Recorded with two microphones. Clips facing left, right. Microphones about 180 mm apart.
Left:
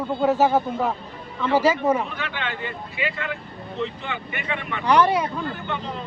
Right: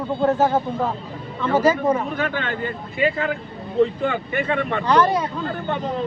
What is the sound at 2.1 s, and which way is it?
Speech, 45° right (ahead or behind).